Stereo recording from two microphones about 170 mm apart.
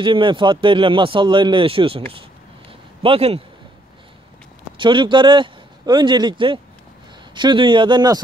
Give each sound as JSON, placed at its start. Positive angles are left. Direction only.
{"t": 0.0, "sound": "a man's voice", "side_deg": -30}
{"t": 4.7, "sound": "a man's voice", "side_deg": -30}